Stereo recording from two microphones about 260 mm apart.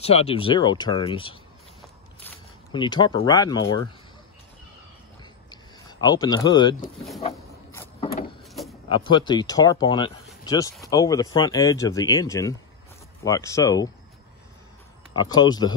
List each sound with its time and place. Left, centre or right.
0.0 s speech: left
2.7 s speech: centre
5.5 s a sound: centre
8.8 s speech: centre
15.1 s speech: centre